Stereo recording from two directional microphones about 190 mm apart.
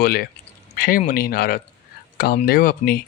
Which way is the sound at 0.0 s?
55° left (ahead or behind).